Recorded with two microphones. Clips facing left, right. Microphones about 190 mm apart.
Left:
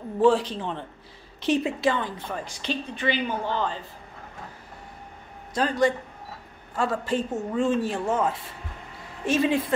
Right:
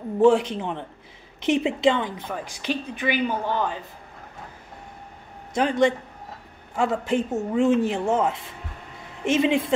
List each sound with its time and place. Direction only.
0.2 s a woman's voice: 20° right (ahead or behind)
5.5 s a woman's voice: 25° right (ahead or behind)